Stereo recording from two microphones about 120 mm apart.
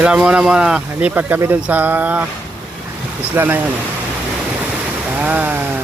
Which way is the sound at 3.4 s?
15° right (ahead or behind).